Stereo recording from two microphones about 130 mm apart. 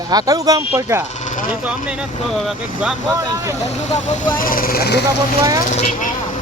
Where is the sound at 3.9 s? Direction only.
75° left (ahead or behind).